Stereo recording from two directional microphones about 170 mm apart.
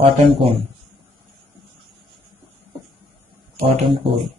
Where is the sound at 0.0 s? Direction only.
35° right (ahead or behind).